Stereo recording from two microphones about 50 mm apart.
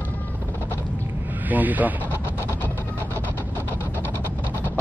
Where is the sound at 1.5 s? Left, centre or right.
Right.